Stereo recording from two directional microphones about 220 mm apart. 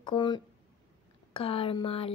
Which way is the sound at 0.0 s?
20° left (ahead or behind).